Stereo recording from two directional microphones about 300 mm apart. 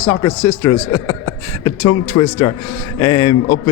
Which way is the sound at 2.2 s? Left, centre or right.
Centre.